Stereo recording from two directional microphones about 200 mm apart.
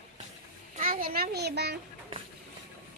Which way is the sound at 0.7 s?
45° right (ahead or behind).